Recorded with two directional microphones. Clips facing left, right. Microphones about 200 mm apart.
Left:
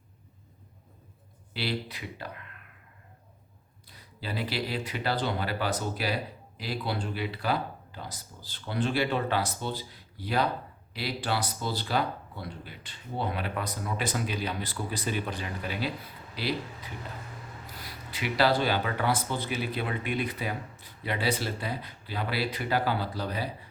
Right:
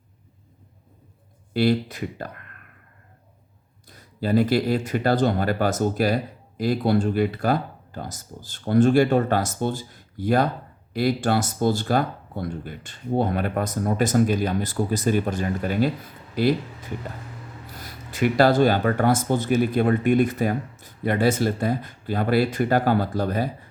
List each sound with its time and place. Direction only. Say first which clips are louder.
1.5 s speech: right 12 dB; 45° right (ahead or behind)
3.8 s speech: right 13 dB; 45° right (ahead or behind)